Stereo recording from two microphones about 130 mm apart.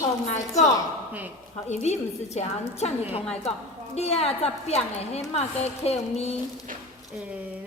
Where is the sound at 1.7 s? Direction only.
55° left (ahead or behind).